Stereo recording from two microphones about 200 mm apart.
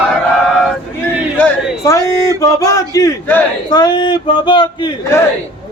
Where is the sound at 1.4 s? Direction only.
15° left (ahead or behind).